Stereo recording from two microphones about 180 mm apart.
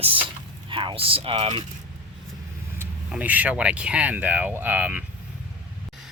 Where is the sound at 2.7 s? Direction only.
10° right (ahead or behind).